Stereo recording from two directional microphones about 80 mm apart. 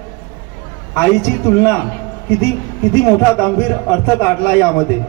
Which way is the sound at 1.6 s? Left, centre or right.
Left.